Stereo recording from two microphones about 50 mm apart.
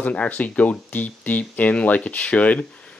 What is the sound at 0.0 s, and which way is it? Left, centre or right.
Speech, left.